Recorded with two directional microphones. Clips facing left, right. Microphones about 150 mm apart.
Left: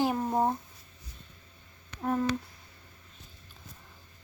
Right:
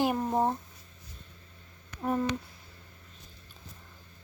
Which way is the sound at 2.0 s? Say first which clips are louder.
Even; 5° right (ahead or behind).